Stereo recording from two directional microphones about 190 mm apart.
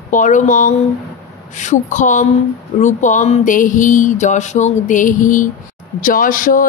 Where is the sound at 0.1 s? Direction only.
45° left (ahead or behind).